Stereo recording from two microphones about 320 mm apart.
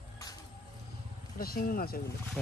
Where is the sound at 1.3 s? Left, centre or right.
Left.